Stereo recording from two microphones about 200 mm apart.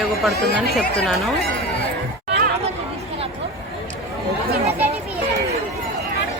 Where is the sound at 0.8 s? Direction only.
Centre (ahead or behind).